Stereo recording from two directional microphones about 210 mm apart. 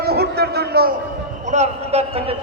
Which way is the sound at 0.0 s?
50° right (ahead or behind).